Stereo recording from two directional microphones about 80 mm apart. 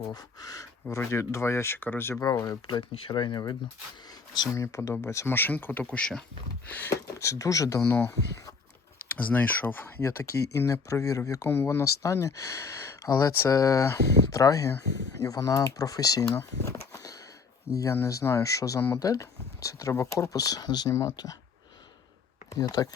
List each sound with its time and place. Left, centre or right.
0.1 s speech: left
2.3 s speech: left
2.6 s speech: left
4.5 s speech: left; by 6.2 s centre
6.7 s speech: left
6.9 s speech: left
7.9 s speech: left
9.1 s speech: left
11.4 s speech: left
16.2 s a sound: left
17.9 s speech: left
22.4 s speech: left